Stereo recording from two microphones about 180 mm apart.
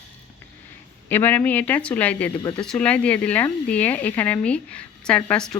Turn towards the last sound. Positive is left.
turn(degrees=5)  # may be behind; listen again after turning